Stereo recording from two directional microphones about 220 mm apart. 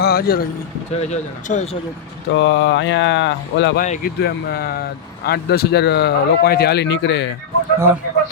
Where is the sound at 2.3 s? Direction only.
55° left (ahead or behind).